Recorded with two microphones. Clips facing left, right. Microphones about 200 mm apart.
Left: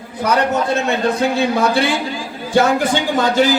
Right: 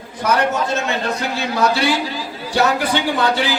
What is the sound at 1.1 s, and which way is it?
A man's voice, 55° left (ahead or behind).